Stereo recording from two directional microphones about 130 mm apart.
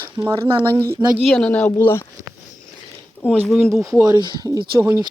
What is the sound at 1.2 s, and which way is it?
Speech, 5° left (ahead or behind).